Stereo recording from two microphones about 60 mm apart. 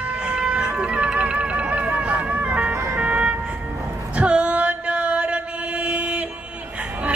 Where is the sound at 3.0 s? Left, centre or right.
Right.